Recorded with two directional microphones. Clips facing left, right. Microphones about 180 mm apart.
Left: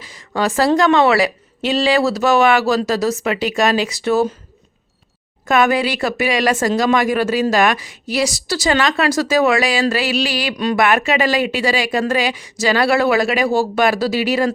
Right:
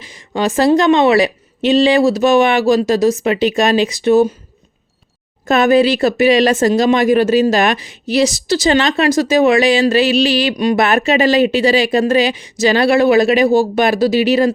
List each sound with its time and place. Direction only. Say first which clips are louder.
0.0 s speech: right 2 dB; 20° right (ahead or behind)
5.5 s speech: right 5 dB; 25° right (ahead or behind)